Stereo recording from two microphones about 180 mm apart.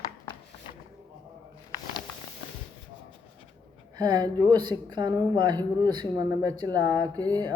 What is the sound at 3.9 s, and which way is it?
Speech, 25° right (ahead or behind).